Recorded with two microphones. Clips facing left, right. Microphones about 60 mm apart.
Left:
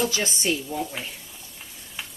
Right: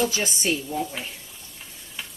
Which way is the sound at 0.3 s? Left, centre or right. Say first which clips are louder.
Even; centre.